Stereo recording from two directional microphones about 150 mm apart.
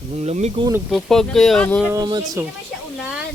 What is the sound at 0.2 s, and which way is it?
Speech, 45° right (ahead or behind).